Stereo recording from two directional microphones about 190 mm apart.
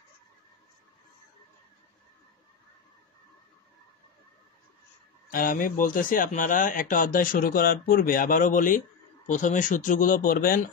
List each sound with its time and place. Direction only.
5.3 s speech: 45° left (ahead or behind)